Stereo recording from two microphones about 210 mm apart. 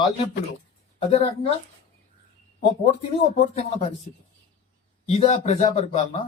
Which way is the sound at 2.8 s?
30° left (ahead or behind).